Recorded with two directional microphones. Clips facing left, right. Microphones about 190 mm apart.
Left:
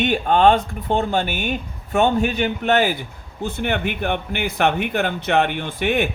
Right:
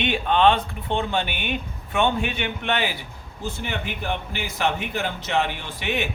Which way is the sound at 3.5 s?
60° left (ahead or behind).